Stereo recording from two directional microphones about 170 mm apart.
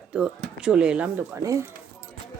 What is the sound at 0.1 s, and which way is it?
Speech, 5° right (ahead or behind).